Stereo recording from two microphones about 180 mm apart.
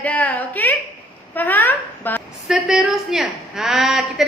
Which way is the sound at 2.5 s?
5° right (ahead or behind).